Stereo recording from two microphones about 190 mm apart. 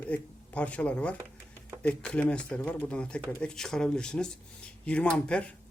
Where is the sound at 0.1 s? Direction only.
5° left (ahead or behind).